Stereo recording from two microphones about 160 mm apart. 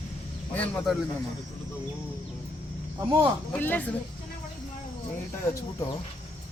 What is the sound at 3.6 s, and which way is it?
Speech, 10° left (ahead or behind).